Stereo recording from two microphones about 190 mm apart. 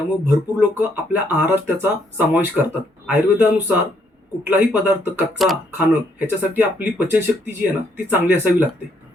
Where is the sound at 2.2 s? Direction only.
10° right (ahead or behind).